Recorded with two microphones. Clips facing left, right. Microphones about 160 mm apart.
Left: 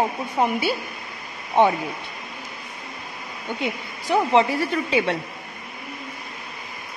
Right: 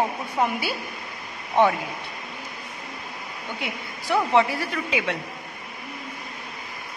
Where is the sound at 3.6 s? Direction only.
20° left (ahead or behind).